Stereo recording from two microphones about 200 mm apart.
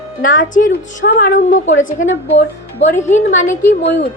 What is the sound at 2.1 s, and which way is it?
Speech, 65° left (ahead or behind).